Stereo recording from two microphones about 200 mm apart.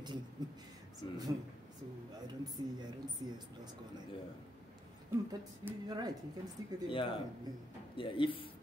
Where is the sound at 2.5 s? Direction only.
20° right (ahead or behind).